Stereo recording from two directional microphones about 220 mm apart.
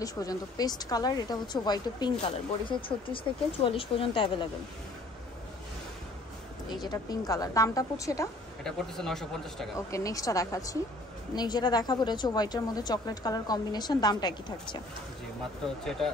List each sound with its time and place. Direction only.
0.0 s a woman's voice: 15° left (ahead or behind)
6.7 s a woman's voice: 20° left (ahead or behind)
8.6 s speech: centre (ahead or behind)
9.8 s a woman's voice: 15° left (ahead or behind)